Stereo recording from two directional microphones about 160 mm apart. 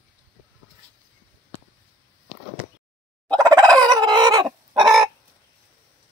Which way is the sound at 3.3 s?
25° right (ahead or behind).